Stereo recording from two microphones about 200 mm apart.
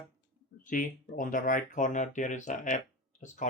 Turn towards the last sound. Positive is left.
turn(degrees=40)  # may be behind; listen again after turning